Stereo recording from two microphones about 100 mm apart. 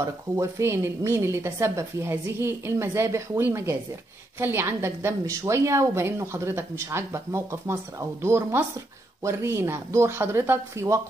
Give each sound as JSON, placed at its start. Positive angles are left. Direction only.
{"t": 0.0, "sound": "a woman's voice", "side_deg": -30}